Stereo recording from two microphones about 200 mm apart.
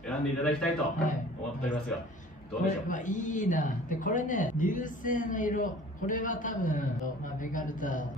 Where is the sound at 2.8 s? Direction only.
40° left (ahead or behind).